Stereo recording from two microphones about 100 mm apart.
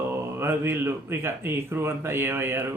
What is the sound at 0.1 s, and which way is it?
Speech, 25° right (ahead or behind).